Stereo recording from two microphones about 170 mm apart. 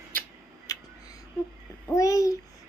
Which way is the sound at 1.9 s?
20° left (ahead or behind).